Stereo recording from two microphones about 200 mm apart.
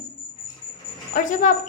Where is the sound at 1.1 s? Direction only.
40° left (ahead or behind).